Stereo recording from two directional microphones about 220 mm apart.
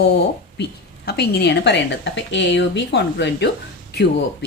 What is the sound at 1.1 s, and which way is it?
Speech, 50° left (ahead or behind).